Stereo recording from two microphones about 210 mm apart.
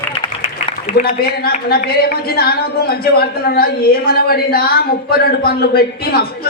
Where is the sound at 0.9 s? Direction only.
40° left (ahead or behind).